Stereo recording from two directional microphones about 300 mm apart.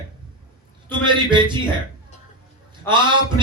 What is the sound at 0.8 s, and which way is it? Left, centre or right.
Speech, centre.